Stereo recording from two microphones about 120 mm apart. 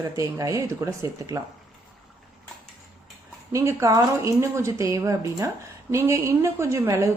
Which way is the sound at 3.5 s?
25° right (ahead or behind).